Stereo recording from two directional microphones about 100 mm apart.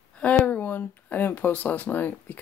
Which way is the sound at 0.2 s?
15° left (ahead or behind).